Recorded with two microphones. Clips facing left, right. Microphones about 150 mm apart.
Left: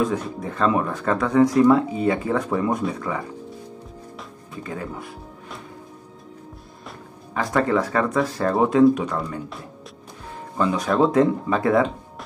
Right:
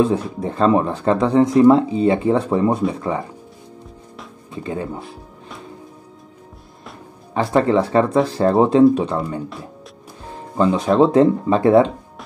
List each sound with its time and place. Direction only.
0.0 s speech: 30° right (ahead or behind)
4.5 s speech: 25° right (ahead or behind)
7.3 s speech: 30° right (ahead or behind)
10.6 s speech: 25° right (ahead or behind)